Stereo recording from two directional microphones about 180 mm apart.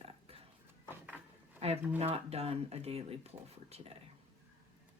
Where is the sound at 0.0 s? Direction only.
35° right (ahead or behind).